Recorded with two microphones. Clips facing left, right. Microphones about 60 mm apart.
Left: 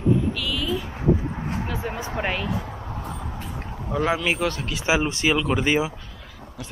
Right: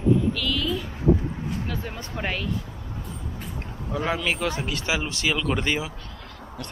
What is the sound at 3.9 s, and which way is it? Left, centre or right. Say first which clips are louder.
Speech: left 3 dB; centre.